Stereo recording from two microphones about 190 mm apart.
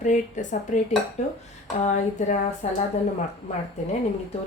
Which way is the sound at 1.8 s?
40° left (ahead or behind).